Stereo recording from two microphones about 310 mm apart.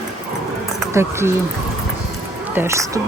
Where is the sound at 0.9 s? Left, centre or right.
Centre.